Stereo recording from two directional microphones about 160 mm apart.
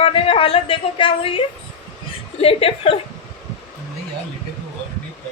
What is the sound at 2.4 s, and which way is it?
Speech, 35° left (ahead or behind).